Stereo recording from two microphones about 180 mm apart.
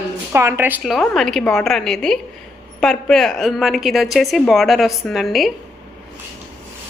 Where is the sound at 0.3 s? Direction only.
15° right (ahead or behind).